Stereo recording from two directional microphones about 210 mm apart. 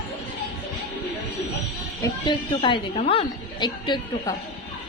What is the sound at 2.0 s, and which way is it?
A woman's voice, 20° left (ahead or behind).